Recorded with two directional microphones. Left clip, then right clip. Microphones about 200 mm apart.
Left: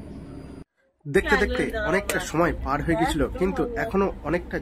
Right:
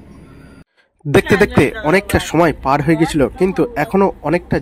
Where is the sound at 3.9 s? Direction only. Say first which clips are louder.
Right 11 dB; 25° right (ahead or behind).